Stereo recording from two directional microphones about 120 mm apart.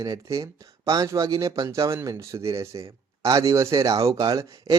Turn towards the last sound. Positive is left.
turn(degrees=-30)  # may be behind; listen again after turning